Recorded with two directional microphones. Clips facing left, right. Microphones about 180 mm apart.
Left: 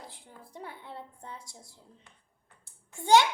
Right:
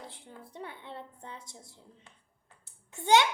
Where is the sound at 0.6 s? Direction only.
20° right (ahead or behind).